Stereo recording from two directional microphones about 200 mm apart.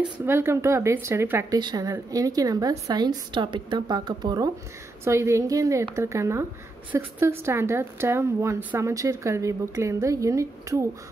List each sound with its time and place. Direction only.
0.2 s a woman's voice: 10° right (ahead or behind)